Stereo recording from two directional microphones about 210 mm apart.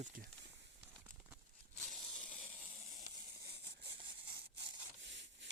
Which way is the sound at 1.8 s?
Centre (ahead or behind).